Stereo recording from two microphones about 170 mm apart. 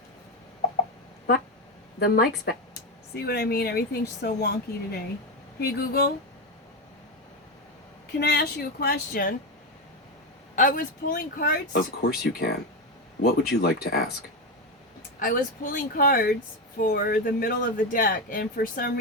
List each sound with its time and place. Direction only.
2.0 s speech: 65° left (ahead or behind)
8.2 s speech: 70° left (ahead or behind)
10.5 s speech: 50° left (ahead or behind); by 12.5 s 70° left (ahead or behind)
13.6 s speech: 65° left (ahead or behind)
15.2 s speech: 55° left (ahead or behind)